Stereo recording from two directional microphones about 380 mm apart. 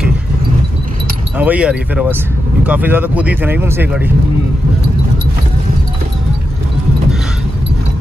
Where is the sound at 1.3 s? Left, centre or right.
Centre.